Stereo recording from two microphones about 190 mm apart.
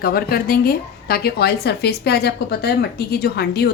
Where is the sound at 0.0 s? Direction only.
55° left (ahead or behind).